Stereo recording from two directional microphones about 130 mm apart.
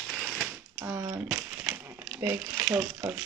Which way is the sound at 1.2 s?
15° right (ahead or behind).